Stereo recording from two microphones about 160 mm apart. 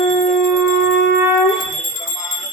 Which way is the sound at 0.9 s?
90° left.